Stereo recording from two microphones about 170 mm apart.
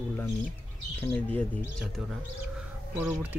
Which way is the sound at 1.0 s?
10° left (ahead or behind).